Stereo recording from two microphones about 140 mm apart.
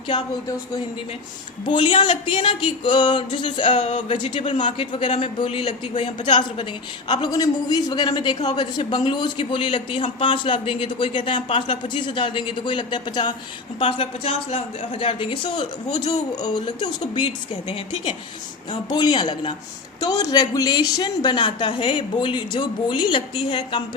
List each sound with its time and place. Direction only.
0.1 s speech: 25° left (ahead or behind)
1.6 s a man's voice: 35° left (ahead or behind)
3.8 s a woman's voice: 55° left (ahead or behind)
4.1 s a man's voice: 35° left (ahead or behind)
5.9 s a woman's voice: 60° left (ahead or behind)
7.1 s a man's voice: 30° left (ahead or behind)
15.9 s a man's voice: 55° left (ahead or behind)
16.3 s a man's voice: 30° left (ahead or behind)
18.7 s a man's voice: 30° left (ahead or behind)